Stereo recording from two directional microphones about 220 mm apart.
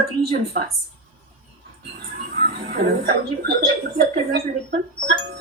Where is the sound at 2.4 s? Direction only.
40° right (ahead or behind).